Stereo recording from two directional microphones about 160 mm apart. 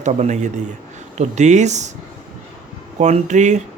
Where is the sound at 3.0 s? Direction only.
45° right (ahead or behind).